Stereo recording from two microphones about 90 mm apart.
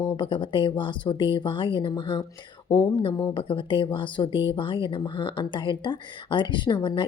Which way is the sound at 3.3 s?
70° left (ahead or behind).